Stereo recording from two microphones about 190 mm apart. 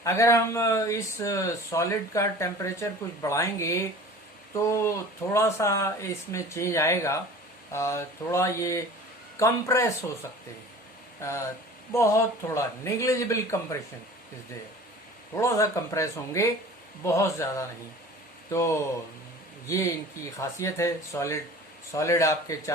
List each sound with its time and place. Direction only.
0.0 s speech: 15° left (ahead or behind)
11.9 s speech: 15° left (ahead or behind)
15.4 s speech: 15° left (ahead or behind)